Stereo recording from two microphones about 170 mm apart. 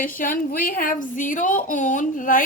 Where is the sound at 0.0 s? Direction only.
55° left (ahead or behind).